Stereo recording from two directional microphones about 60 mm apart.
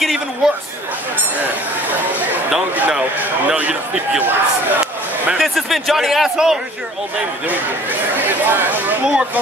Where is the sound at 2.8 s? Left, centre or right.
Centre.